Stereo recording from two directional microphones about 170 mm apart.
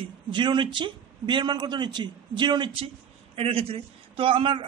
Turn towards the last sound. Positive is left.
turn(degrees=-30)  # may be behind; listen again after turning